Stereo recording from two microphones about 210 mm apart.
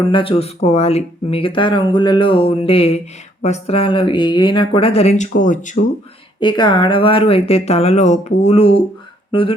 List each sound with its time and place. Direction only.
0.1 s speech: 25° left (ahead or behind)
6.4 s speech: 20° left (ahead or behind)
9.3 s a sound: 25° left (ahead or behind)